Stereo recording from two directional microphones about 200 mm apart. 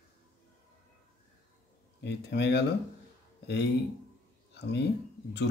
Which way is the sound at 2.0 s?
60° left (ahead or behind).